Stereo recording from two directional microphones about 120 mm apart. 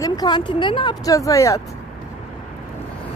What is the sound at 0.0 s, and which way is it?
Speech, 35° left (ahead or behind).